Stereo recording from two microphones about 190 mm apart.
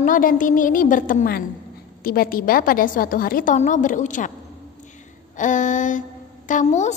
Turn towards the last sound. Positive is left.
turn(degrees=35)  # may be behind; listen again after turning